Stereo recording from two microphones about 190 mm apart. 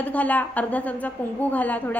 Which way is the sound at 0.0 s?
10° left (ahead or behind).